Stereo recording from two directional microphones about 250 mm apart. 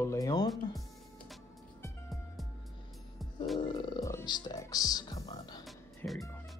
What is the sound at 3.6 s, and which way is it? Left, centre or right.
Music, centre.